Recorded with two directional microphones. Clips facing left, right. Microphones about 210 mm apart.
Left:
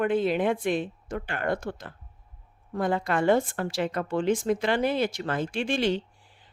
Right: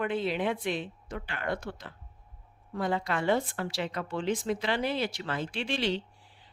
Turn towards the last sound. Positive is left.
turn(degrees=50)  # may be behind; listen again after turning